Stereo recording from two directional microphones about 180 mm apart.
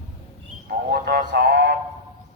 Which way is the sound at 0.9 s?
60° right (ahead or behind).